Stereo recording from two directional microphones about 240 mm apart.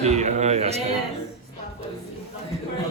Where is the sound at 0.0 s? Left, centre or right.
Right.